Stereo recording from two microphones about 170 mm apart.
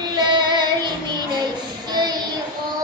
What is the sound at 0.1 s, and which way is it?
Child singing, 25° right (ahead or behind).